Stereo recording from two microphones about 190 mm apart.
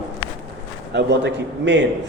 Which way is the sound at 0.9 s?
65° right (ahead or behind).